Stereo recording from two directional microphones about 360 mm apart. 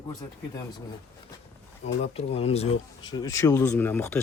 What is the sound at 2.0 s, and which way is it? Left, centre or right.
Speech, centre.